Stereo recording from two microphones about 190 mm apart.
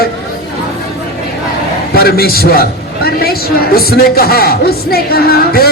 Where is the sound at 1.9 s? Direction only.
55° left (ahead or behind).